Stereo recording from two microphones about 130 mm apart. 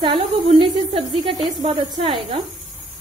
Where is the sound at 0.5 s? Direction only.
45° right (ahead or behind).